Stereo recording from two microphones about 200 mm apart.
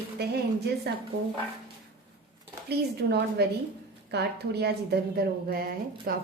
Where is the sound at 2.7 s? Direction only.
55° right (ahead or behind).